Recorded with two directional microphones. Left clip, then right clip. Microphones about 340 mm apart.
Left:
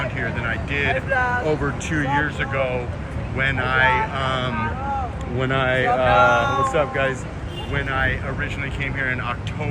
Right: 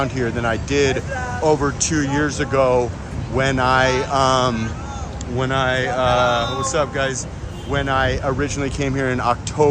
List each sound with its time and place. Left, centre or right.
0.7 s speech: centre